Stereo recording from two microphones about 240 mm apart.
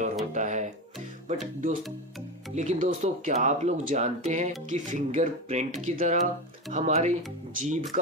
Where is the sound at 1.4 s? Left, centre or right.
Right.